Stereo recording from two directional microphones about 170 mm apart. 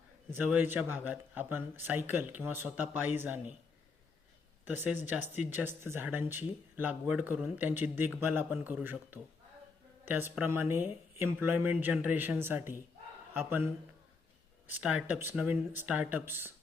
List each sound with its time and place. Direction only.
0.3 s speech: 10° right (ahead or behind)
4.6 s speech: 10° right (ahead or behind)
14.8 s speech: 5° right (ahead or behind)